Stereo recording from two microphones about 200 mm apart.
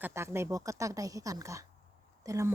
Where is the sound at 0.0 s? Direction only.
15° right (ahead or behind).